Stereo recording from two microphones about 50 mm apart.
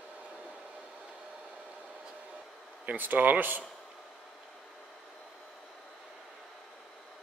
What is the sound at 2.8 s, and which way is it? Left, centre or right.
Speech, right.